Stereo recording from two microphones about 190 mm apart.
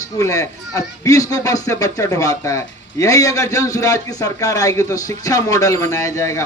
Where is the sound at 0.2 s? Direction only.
15° left (ahead or behind).